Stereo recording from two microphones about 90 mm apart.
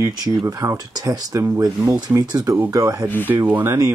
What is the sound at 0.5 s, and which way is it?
Speech, 40° right (ahead or behind).